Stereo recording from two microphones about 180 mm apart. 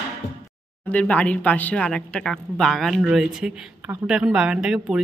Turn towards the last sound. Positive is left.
turn(degrees=-5)  # may be behind; listen again after turning